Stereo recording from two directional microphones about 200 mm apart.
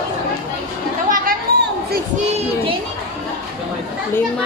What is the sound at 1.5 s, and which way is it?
Children playing, 50° right (ahead or behind).